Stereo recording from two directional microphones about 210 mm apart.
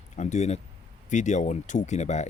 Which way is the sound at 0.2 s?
35° left (ahead or behind).